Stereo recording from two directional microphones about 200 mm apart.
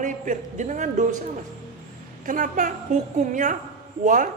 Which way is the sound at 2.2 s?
40° right (ahead or behind).